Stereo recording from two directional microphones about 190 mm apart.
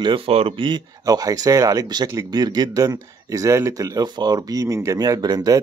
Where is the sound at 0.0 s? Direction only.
25° right (ahead or behind).